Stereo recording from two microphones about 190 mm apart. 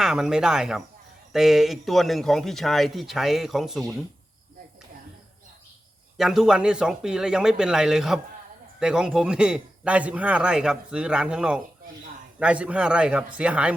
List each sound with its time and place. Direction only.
0.0 s a man's voice: 5° right (ahead or behind)
6.1 s a man's voice: centre (ahead or behind)